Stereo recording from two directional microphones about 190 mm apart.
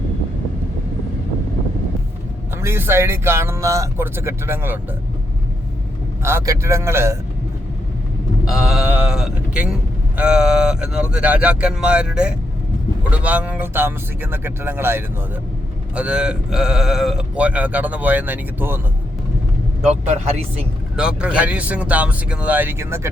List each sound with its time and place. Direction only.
2.6 s speech: 10° right (ahead or behind)
6.2 s speech: 15° right (ahead or behind)
8.4 s speech: centre (ahead or behind)
19.8 s speech: 35° right (ahead or behind)
20.9 s speech: 5° right (ahead or behind)